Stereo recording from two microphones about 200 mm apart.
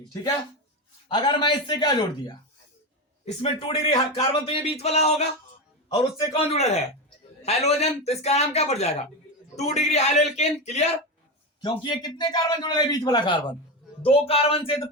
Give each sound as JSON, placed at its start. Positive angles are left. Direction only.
{"t": 1.0, "sound": "a man's voice", "side_deg": 25}
{"t": 3.4, "sound": "speech", "side_deg": 30}
{"t": 6.3, "sound": "speech", "side_deg": 30}
{"t": 11.6, "sound": "a man's voice", "side_deg": 20}